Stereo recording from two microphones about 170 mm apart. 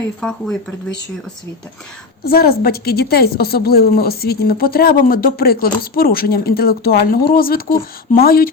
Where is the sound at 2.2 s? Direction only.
60° left (ahead or behind).